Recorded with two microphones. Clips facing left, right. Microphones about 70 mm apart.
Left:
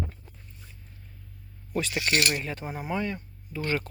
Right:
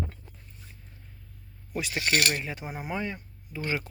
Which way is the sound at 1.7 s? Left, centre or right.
Centre.